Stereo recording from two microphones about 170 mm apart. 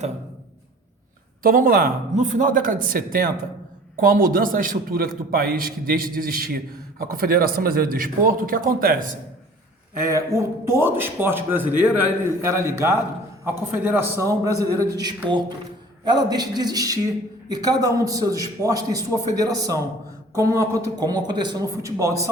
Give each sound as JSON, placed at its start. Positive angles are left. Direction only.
{"t": 1.4, "sound": "a man's voice", "side_deg": -55}
{"t": 10.3, "sound": "a man's voice", "side_deg": -15}